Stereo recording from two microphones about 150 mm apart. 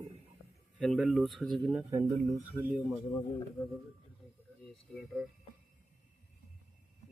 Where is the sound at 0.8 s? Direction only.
Centre (ahead or behind).